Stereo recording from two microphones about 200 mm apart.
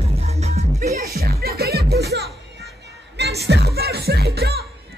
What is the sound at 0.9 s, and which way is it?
Music, 50° right (ahead or behind).